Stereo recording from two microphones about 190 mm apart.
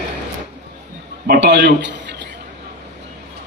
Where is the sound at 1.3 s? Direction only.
60° right (ahead or behind).